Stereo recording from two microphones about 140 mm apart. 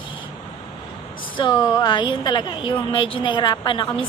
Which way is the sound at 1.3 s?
35° left (ahead or behind).